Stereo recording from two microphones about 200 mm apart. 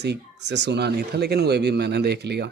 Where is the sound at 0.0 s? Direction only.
60° right (ahead or behind).